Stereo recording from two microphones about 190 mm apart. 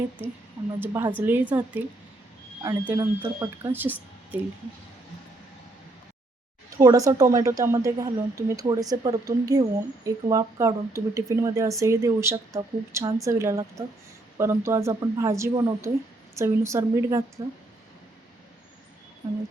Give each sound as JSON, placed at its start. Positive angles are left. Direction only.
{"t": 0.2, "sound": "a woman's voice", "side_deg": -10}
{"t": 6.7, "sound": "a woman's voice", "side_deg": -15}